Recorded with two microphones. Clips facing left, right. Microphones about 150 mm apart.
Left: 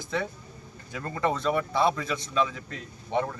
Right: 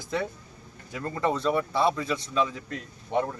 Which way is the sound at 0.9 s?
Centre (ahead or behind).